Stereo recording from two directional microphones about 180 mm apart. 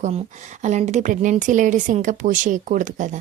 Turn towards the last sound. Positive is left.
turn(degrees=-45)  # may be behind; listen again after turning